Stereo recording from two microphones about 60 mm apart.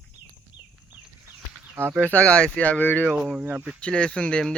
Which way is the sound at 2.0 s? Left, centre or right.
Left.